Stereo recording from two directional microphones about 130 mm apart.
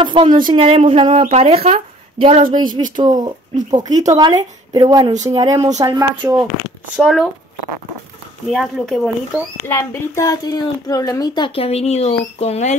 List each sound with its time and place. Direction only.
0.0 s speech: 40° right (ahead or behind)
3.0 s speech: 30° right (ahead or behind)
7.0 s speech: 5° left (ahead or behind)
8.5 s speech: centre (ahead or behind)
9.7 s speech: 20° left (ahead or behind); by 12.7 s 55° left (ahead or behind)